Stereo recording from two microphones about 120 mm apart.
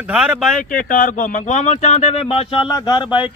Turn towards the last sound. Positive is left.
turn(degrees=40)  # may be behind; listen again after turning